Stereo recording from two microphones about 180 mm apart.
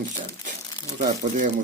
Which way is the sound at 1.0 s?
45° right (ahead or behind).